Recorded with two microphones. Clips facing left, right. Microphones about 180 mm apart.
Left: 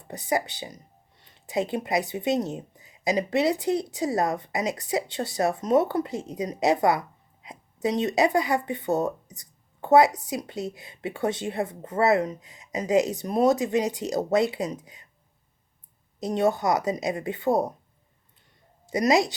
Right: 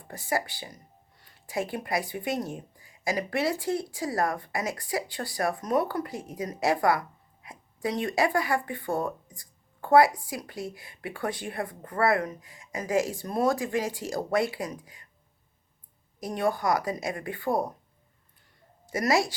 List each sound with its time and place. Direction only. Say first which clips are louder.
0.0 s speech: left 3 dB; 20° left (ahead or behind)
9.3 s a sound: left 2 dB; 20° left (ahead or behind)
10.2 s speech: left 5 dB; 20° left (ahead or behind)
16.2 s speech: left 4 dB; 25° left (ahead or behind)
18.9 s speech: left 4 dB; 20° left (ahead or behind)